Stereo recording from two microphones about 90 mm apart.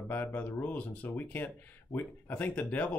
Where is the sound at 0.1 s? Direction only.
20° left (ahead or behind).